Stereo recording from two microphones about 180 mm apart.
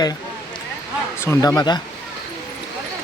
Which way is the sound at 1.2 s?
15° left (ahead or behind).